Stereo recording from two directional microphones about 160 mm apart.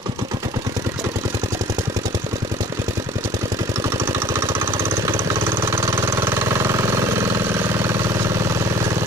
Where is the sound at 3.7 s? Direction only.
15° right (ahead or behind).